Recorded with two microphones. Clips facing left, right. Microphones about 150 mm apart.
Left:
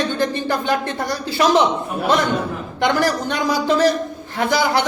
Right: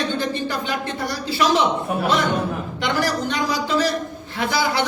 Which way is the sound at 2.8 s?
50° left (ahead or behind).